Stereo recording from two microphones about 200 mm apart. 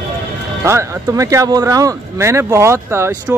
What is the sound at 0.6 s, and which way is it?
Speech, 15° right (ahead or behind).